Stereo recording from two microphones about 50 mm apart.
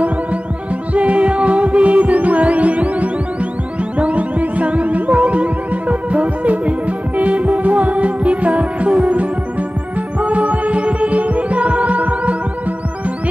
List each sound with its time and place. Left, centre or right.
0.9 s music: right
4.0 s throbbing: right
7.2 s music: right
9.0 s throbbing: right
10.2 s music: right